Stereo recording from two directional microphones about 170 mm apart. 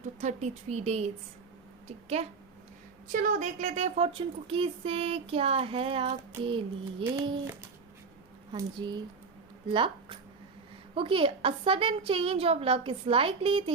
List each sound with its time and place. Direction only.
0.0 s speech: 45° right (ahead or behind)
2.2 s speech: 35° right (ahead or behind)
3.1 s speech: 50° right (ahead or behind); by 7.2 s 30° right (ahead or behind)
8.5 s speech: 25° right (ahead or behind)